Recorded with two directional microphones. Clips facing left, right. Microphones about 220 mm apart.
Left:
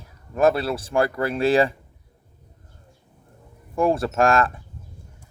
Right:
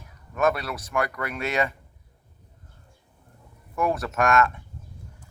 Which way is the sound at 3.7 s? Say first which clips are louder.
Left 5 dB; 30° left (ahead or behind).